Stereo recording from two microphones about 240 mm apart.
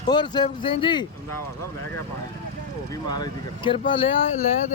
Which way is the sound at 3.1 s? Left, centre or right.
Centre.